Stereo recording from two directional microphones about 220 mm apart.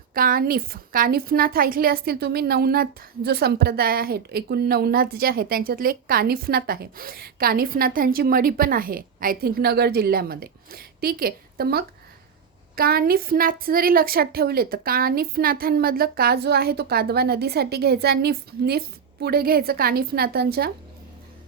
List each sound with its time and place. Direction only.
0.1 s a woman's voice: 40° right (ahead or behind)